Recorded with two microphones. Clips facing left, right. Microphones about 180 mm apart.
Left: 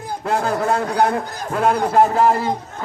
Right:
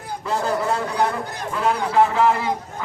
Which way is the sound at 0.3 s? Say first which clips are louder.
Left 3 dB; 55° left (ahead or behind).